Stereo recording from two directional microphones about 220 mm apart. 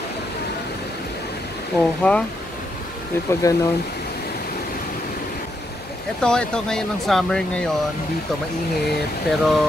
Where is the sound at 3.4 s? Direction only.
15° left (ahead or behind).